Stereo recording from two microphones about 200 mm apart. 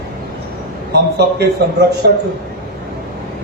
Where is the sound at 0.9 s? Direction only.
55° right (ahead or behind).